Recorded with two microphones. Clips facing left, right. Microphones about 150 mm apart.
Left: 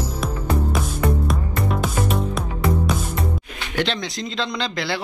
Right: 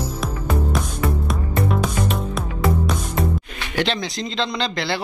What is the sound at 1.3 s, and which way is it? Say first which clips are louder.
Music: right 2 dB; centre (ahead or behind).